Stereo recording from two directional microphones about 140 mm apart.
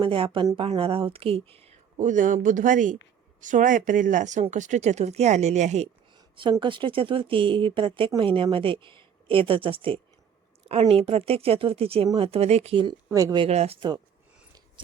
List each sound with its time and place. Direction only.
0.0 s speech: 40° right (ahead or behind); by 5.9 s 55° right (ahead or behind)
6.1 s speech: 35° right (ahead or behind)
13.1 s speech: 20° right (ahead or behind)
13.5 s speech: 50° right (ahead or behind)